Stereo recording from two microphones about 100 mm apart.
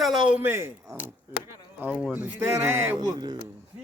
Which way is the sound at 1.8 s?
15° right (ahead or behind).